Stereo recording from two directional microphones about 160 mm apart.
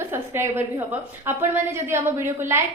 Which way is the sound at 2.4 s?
15° right (ahead or behind).